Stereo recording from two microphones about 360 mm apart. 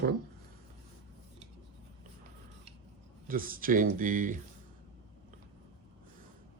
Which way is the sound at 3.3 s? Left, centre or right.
Right.